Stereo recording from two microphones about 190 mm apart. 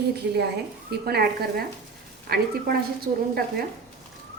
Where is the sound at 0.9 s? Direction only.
55° right (ahead or behind).